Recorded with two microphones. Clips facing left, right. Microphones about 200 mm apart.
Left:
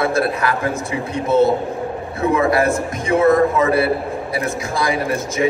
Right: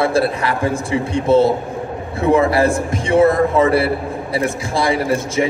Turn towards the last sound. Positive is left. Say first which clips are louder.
# right 2 dB
turn(degrees=-30)  # may be behind; listen again after turning